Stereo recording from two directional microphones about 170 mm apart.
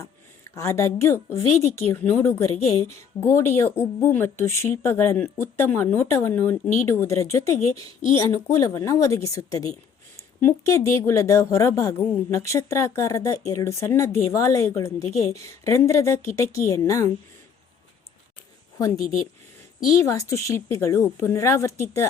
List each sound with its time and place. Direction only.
0.0 s a woman's voice: 20° left (ahead or behind)
18.8 s a woman's voice: 20° left (ahead or behind)